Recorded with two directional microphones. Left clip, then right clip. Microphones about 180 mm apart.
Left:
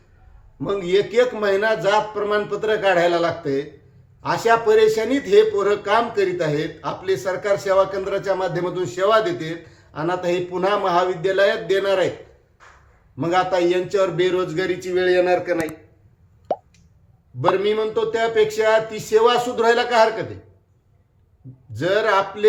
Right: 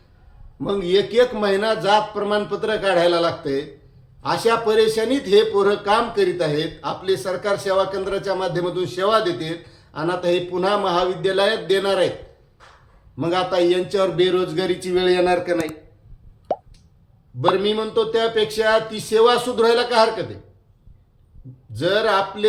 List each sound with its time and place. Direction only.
0.6 s speech: 15° right (ahead or behind)
13.1 s speech: 10° right (ahead or behind)
16.5 s plop: centre (ahead or behind)
17.4 s speech: 10° right (ahead or behind)
21.7 s a man's voice: 5° right (ahead or behind)